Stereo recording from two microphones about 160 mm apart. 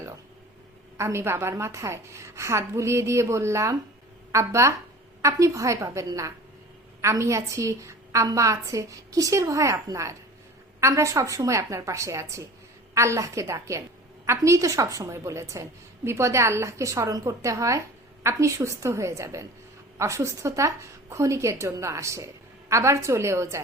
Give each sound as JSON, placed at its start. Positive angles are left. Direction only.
{"t": 0.9, "sound": "a woman's voice", "side_deg": -15}